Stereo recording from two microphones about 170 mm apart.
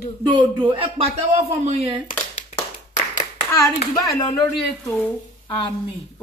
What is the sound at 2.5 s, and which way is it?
Clapping, 30° left (ahead or behind).